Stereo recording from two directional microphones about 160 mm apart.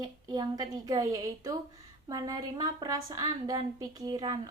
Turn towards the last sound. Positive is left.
turn(degrees=-25)  # may be behind; listen again after turning